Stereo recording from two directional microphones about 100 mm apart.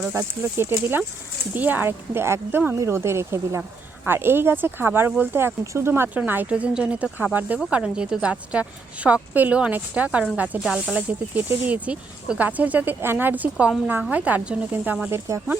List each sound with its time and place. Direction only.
0.0 s speech: 25° right (ahead or behind); by 10.9 s 5° right (ahead or behind)
10.9 s speech: 15° right (ahead or behind)
15.3 s speech: 30° right (ahead or behind)